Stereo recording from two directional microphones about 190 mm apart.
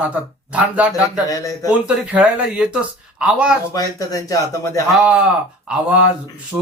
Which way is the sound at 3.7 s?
20° left (ahead or behind).